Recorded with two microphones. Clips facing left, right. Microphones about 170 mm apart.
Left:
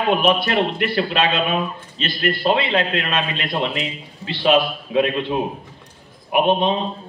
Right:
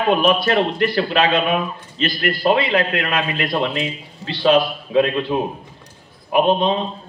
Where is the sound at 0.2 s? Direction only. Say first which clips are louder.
Right 2 dB; 20° left (ahead or behind).